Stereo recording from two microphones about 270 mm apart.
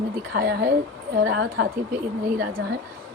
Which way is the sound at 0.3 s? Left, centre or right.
Right.